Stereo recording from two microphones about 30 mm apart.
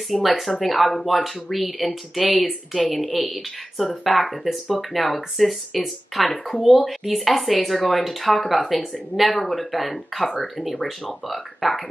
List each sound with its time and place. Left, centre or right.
0.1 s speech: centre